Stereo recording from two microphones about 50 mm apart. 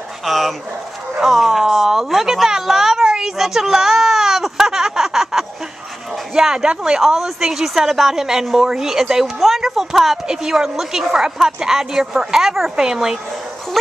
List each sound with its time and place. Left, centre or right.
0.2 s dog: centre
1.2 s a sound: centre
6.3 s speech: centre